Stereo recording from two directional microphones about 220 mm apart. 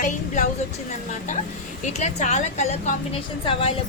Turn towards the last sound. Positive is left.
turn(degrees=25)  # may be behind; listen again after turning